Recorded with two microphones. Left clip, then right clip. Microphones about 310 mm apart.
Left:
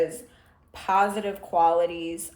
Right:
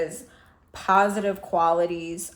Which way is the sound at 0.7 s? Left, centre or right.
Right.